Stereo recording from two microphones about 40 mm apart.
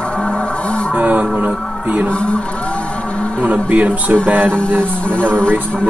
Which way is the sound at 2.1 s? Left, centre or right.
Left.